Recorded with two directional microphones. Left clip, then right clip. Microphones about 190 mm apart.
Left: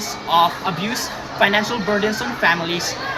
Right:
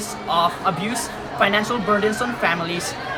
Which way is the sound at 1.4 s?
10° right (ahead or behind).